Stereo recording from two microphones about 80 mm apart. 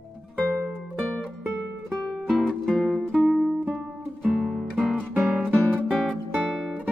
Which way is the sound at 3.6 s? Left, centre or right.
Centre.